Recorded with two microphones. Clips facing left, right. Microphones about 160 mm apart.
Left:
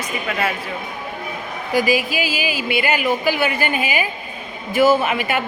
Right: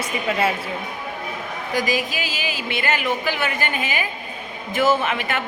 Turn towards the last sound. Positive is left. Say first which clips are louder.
# left 4 dB
turn(degrees=10)  # may be behind; listen again after turning